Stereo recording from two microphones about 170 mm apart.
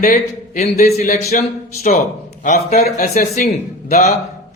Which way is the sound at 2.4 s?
45° left (ahead or behind).